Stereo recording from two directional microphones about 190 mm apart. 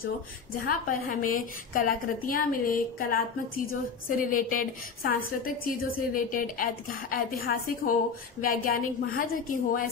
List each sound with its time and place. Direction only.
0.7 s a woman's voice: 45° left (ahead or behind)